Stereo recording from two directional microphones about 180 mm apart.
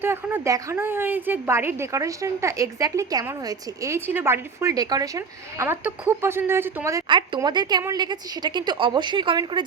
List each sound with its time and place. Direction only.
0.0 s a woman's voice: 10° right (ahead or behind)